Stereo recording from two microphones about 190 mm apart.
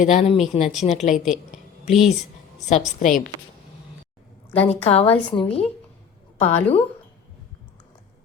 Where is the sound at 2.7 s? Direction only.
35° left (ahead or behind).